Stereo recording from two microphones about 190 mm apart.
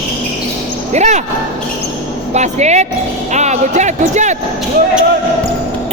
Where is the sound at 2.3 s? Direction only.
35° right (ahead or behind).